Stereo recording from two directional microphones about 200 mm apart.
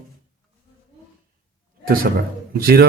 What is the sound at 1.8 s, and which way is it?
A man's voice, 45° right (ahead or behind).